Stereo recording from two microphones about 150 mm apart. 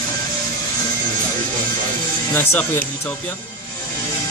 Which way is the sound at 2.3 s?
15° left (ahead or behind).